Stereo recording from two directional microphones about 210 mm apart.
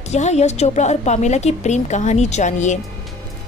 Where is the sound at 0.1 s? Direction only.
30° left (ahead or behind).